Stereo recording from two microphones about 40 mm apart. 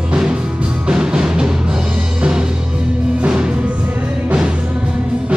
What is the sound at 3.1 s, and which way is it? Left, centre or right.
Music, right.